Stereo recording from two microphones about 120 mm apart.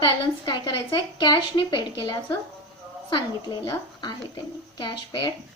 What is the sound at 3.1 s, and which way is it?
Speech, 40° left (ahead or behind).